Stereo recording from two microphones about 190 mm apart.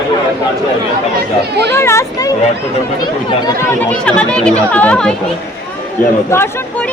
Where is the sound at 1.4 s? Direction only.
60° right (ahead or behind).